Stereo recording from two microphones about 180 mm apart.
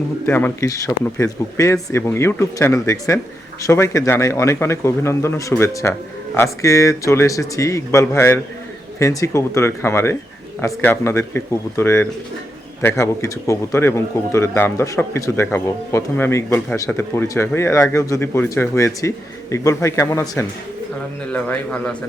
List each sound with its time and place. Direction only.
0.3 s speech: 10° left (ahead or behind)